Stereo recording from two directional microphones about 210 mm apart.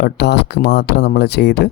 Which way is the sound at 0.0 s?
55° left (ahead or behind).